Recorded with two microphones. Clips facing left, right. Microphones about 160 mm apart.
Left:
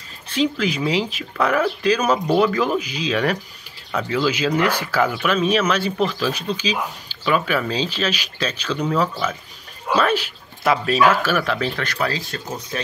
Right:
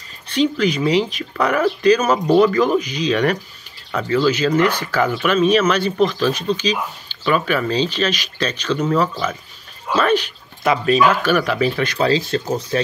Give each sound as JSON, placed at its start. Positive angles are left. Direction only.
{"t": 0.3, "sound": "speech", "side_deg": 5}
{"t": 12.0, "sound": "speech", "side_deg": -30}